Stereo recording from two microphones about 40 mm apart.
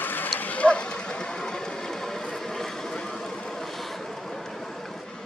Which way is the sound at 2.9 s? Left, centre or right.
Centre.